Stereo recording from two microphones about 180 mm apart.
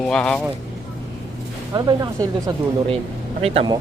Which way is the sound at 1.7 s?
20° right (ahead or behind).